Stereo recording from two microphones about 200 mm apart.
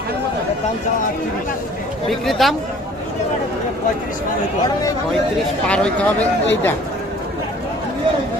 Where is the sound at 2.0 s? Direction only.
Centre (ahead or behind).